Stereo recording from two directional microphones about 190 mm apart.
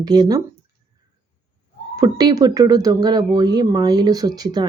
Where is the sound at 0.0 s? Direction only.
20° right (ahead or behind).